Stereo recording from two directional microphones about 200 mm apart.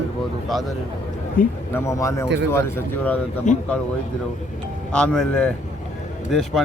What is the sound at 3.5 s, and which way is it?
Speech, 40° left (ahead or behind).